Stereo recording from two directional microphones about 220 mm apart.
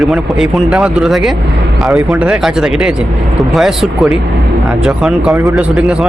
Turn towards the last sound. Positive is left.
turn(degrees=0)  # may be behind; listen again after turning